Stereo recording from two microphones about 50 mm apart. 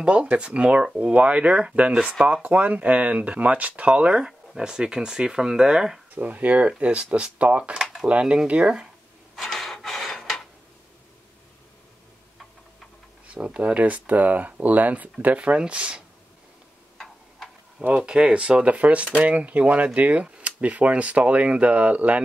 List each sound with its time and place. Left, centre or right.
0.0 s speech: right
4.2 s speech: centre
6.1 s speech: right
7.7 s a sound: centre
8.1 s speech: right
9.3 s dishes: centre
13.3 s speech: right
17.8 s speech: right
18.1 s speech: centre